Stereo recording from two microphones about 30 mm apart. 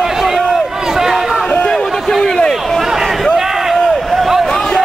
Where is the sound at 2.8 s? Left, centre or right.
Centre.